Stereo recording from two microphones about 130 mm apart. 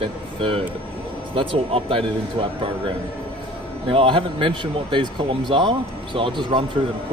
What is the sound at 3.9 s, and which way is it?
Speech, 45° right (ahead or behind).